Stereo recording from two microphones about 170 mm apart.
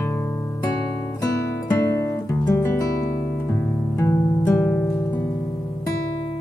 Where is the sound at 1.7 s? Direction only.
15° left (ahead or behind).